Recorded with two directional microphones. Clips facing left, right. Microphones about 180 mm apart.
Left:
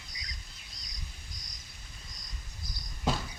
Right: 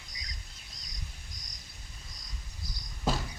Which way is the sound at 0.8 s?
45° right (ahead or behind).